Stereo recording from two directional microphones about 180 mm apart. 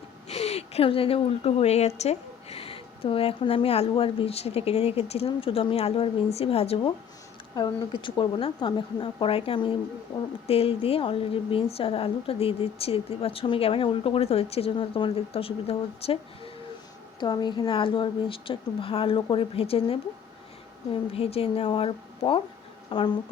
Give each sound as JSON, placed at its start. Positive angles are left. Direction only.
{"t": 0.3, "sound": "a woman's voice", "side_deg": 35}
{"t": 17.2, "sound": "a woman's voice", "side_deg": 25}